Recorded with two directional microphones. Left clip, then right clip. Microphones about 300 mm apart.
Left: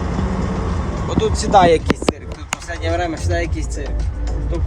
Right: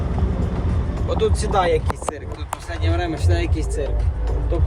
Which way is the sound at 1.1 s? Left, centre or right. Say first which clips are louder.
Left 6 dB; centre.